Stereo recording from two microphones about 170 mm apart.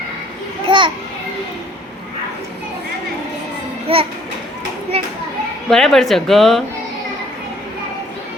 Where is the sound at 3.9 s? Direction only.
35° right (ahead or behind).